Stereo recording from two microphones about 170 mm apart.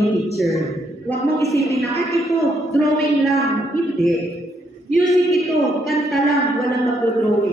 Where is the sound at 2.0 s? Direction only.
Centre (ahead or behind).